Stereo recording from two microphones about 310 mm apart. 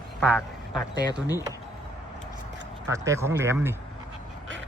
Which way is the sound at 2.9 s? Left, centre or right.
Centre.